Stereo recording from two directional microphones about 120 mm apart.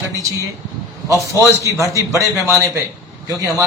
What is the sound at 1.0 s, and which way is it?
A man's voice, 25° right (ahead or behind).